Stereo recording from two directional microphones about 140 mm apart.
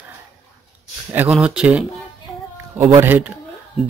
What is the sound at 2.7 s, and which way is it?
Speech, 20° right (ahead or behind).